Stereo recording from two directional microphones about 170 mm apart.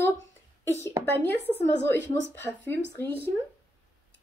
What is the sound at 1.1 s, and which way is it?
A woman's voice, 10° left (ahead or behind).